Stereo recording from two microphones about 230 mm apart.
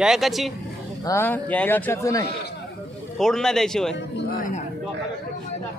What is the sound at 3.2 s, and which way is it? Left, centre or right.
Speech, centre.